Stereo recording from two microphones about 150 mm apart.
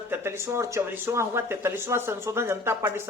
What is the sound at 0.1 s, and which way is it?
Speech, 15° right (ahead or behind).